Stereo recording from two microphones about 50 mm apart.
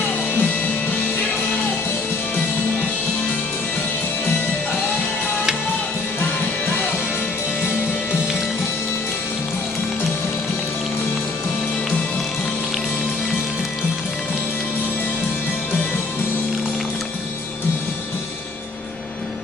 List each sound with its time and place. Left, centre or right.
0.3 s music: left
6.1 s music: left
7.6 s music: right